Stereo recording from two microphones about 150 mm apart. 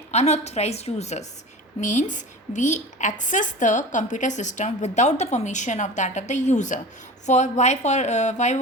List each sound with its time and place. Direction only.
0.1 s a woman's voice: 45° left (ahead or behind)